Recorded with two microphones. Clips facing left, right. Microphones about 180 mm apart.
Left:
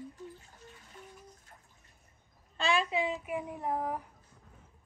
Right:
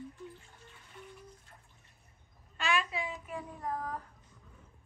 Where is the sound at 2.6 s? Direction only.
30° left (ahead or behind); by 4.0 s 15° left (ahead or behind).